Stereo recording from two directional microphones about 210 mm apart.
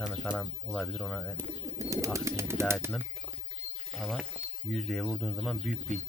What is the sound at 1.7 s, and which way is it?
Speech, 15° right (ahead or behind).